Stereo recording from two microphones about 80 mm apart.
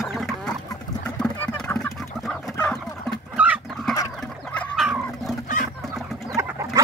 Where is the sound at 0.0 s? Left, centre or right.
Centre.